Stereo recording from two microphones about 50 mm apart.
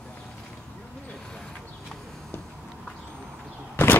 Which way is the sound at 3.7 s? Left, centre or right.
Left.